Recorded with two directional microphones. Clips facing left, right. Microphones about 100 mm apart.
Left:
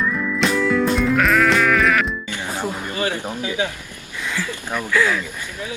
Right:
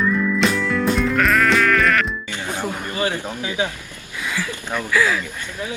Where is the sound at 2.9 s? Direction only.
20° right (ahead or behind).